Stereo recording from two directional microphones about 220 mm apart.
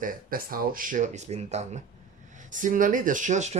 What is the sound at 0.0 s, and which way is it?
Speech, 40° right (ahead or behind).